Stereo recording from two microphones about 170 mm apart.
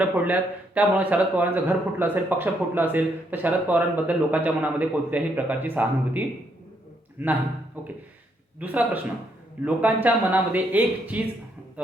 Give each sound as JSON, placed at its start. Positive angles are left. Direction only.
{"t": 0.0, "sound": "a man's voice", "side_deg": -10}